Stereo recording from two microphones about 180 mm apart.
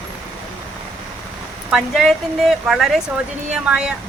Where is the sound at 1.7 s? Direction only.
Centre (ahead or behind).